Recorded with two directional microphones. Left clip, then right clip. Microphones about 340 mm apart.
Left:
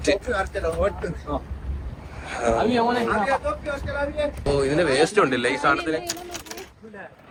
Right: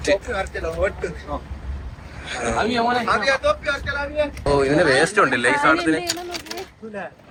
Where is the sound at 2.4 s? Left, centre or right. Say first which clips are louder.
Even; centre.